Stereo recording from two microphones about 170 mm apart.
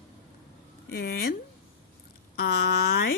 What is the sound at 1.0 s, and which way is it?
Speech, 60° left (ahead or behind).